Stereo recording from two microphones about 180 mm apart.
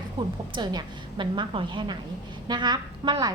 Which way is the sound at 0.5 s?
25° right (ahead or behind).